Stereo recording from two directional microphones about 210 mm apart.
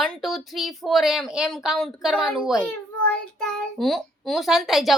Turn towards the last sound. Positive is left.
turn(degrees=0)  # may be behind; listen again after turning